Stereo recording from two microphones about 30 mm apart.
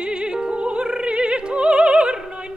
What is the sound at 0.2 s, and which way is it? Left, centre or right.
Opera, right.